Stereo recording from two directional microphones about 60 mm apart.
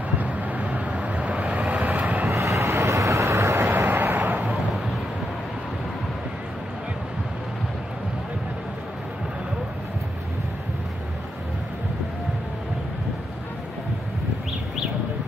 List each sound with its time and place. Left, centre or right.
0.2 s vehicle: right
2.2 s vehicle: right
3.8 s a sound: right